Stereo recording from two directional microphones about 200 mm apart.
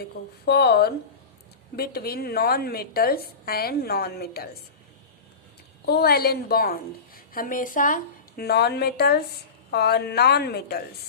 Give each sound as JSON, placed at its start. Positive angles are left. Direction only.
{"t": 0.0, "sound": "a woman's voice", "side_deg": 55}
{"t": 5.8, "sound": "a woman's voice", "side_deg": 50}